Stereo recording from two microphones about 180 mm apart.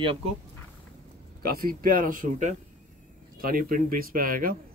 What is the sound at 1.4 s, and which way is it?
Speech, 55° right (ahead or behind).